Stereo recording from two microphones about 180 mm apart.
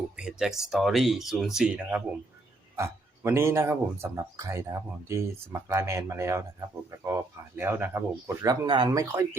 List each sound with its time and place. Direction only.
0.2 s a man's voice: 5° right (ahead or behind)
8.4 s speech: 25° right (ahead or behind)